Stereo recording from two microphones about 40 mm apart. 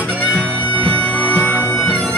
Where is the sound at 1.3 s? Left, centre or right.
Left.